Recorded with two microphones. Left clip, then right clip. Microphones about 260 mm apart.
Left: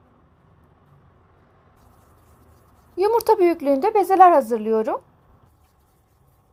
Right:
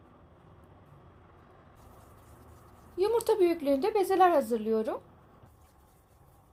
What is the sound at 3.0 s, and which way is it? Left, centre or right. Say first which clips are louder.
Speech: left 9 dB; left.